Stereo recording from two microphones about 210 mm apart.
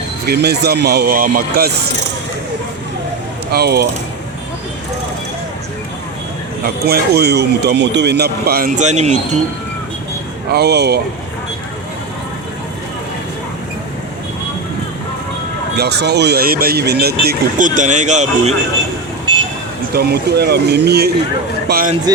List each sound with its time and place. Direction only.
0.3 s speech: 50° right (ahead or behind)
3.5 s speech: 50° right (ahead or behind)
6.8 s speech: 50° right (ahead or behind); by 9.1 s 35° right (ahead or behind)
10.5 s speech: 50° right (ahead or behind)
15.7 s speech: 50° right (ahead or behind)
17.2 s speech: 35° right (ahead or behind)
19.9 s speech: 50° right (ahead or behind)